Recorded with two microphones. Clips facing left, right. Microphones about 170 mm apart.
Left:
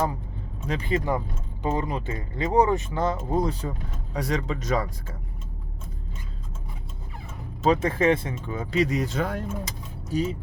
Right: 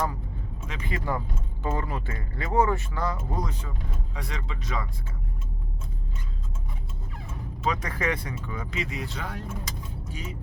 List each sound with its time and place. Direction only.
0.7 s speech: 30° left (ahead or behind)
7.6 s speech: 30° left (ahead or behind); by 9.4 s 45° left (ahead or behind)
10.1 s speech: 35° left (ahead or behind)